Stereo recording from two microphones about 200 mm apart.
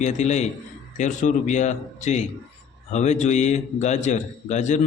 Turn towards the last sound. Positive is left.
turn(degrees=35)  # may be behind; listen again after turning